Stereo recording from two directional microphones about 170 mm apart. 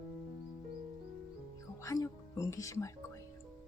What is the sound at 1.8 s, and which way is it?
Music, 20° left (ahead or behind).